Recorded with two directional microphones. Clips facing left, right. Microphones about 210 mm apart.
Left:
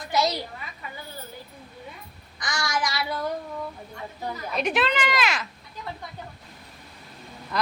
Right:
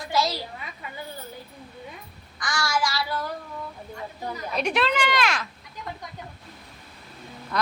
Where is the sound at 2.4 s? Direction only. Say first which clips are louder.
Right 2 dB; 20° left (ahead or behind).